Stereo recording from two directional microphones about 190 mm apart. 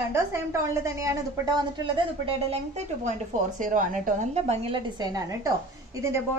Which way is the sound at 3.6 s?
45° right (ahead or behind).